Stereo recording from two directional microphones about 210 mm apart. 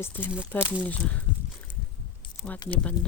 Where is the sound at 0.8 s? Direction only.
5° left (ahead or behind).